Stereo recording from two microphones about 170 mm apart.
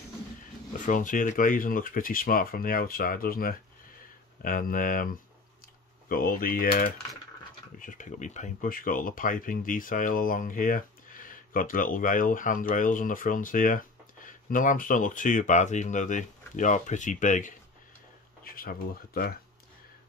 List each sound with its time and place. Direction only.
0.7 s speech: 50° left (ahead or behind)
18.4 s speech: 60° left (ahead or behind)